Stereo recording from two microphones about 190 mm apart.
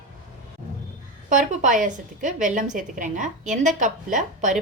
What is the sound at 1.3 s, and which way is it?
A woman's voice, 45° right (ahead or behind).